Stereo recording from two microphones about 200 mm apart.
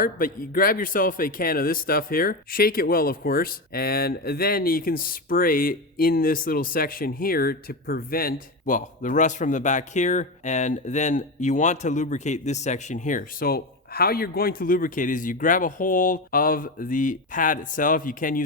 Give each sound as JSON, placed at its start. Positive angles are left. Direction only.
{"t": 0.0, "sound": "a man's voice", "side_deg": 45}